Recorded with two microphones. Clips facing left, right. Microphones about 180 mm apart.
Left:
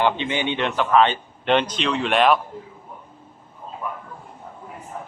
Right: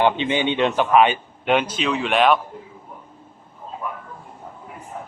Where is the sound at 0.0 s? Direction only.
20° right (ahead or behind); by 2.4 s centre (ahead or behind).